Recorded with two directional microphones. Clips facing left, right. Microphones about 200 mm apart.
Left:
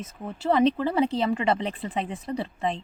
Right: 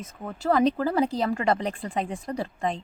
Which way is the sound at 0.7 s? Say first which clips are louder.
Even; 40° right (ahead or behind).